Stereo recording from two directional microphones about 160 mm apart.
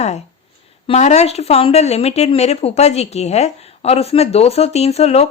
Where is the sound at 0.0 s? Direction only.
45° left (ahead or behind).